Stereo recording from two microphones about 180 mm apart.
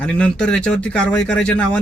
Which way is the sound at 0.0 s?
5° left (ahead or behind).